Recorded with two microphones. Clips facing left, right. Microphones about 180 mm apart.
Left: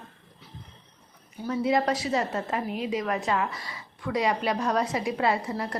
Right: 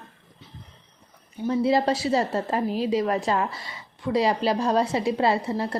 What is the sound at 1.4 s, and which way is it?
A woman's voice, 30° right (ahead or behind).